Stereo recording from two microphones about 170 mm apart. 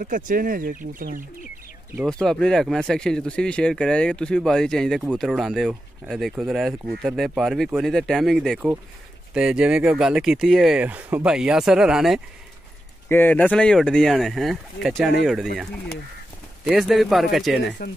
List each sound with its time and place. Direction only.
0.0 s speech: 55° right (ahead or behind)
2.0 s speech: 5° left (ahead or behind)
13.1 s speech: 10° left (ahead or behind)